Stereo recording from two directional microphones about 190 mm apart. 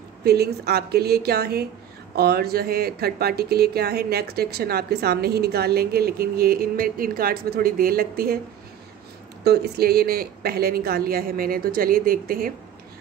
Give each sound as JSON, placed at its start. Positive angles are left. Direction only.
{"t": 0.2, "sound": "a woman's voice", "side_deg": -55}
{"t": 9.4, "sound": "speech", "side_deg": -55}